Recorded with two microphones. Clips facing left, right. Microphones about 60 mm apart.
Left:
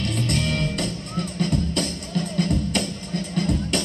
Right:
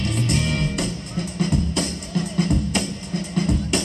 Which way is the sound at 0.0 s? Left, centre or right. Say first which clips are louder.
Right 1 dB; centre.